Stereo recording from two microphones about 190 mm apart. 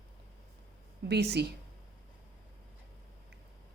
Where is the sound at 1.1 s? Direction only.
60° right (ahead or behind).